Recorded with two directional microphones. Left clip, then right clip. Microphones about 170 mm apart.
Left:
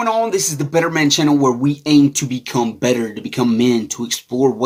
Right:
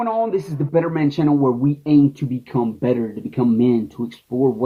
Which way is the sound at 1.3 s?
25° left (ahead or behind).